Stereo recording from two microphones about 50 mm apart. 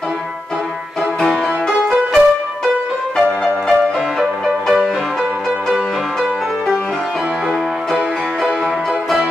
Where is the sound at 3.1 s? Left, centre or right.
Centre.